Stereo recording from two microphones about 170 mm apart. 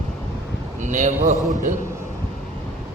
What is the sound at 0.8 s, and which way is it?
Speech, 45° right (ahead or behind).